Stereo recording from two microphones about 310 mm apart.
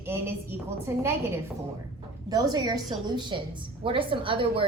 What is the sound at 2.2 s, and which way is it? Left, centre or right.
A woman's voice, centre.